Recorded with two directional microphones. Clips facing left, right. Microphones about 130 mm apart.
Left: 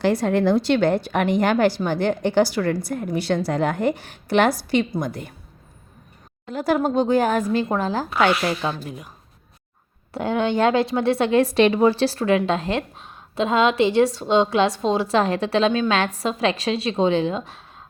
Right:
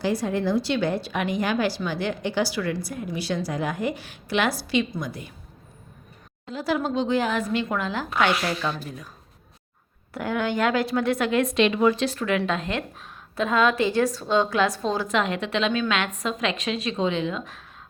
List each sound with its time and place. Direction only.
0.0 s a woman's voice: 65° left (ahead or behind)
6.5 s a woman's voice: 50° left (ahead or behind)
8.4 s a woman's voice: 20° left (ahead or behind)
10.2 s a woman's voice: 25° left (ahead or behind)